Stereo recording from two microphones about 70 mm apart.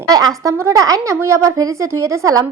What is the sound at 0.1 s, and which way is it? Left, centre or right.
A woman's voice, right.